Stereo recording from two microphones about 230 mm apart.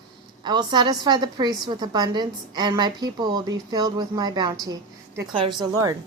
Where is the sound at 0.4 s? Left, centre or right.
Centre.